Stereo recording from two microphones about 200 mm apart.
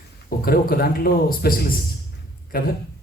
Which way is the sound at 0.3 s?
50° left (ahead or behind).